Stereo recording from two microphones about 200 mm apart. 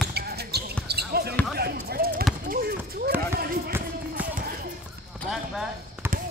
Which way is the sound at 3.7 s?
10° right (ahead or behind).